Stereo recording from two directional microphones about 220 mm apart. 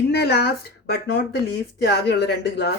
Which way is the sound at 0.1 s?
50° left (ahead or behind).